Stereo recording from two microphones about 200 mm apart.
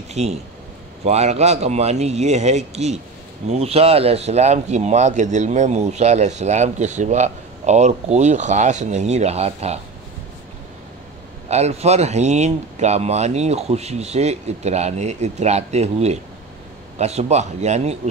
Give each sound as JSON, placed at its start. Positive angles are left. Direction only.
{"t": 0.1, "sound": "speech", "side_deg": -35}
{"t": 11.4, "sound": "speech", "side_deg": -30}